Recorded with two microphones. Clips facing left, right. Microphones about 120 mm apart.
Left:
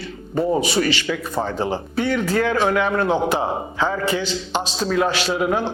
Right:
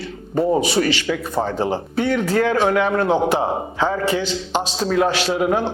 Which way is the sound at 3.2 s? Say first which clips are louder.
Right 2 dB; 65° right (ahead or behind).